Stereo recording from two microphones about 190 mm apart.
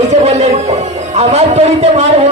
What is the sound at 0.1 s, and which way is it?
Music, 35° right (ahead or behind).